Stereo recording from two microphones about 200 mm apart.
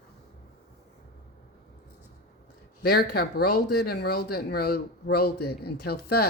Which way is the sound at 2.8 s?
50° left (ahead or behind).